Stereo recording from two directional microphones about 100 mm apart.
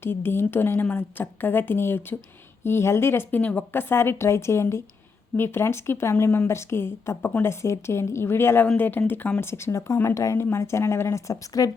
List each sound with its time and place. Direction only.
0.0 s a woman's voice: 20° left (ahead or behind)